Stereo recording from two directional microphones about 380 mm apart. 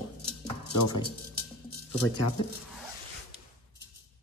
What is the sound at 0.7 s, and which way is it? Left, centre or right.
Music, left.